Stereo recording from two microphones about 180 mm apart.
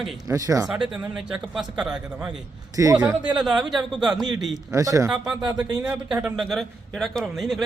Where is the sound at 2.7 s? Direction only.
20° right (ahead or behind).